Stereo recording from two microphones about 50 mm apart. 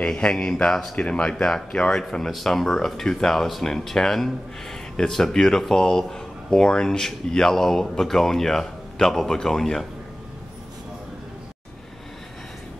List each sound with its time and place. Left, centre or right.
0.0 s speech: centre